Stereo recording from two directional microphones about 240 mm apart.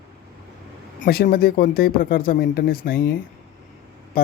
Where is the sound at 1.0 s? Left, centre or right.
Left.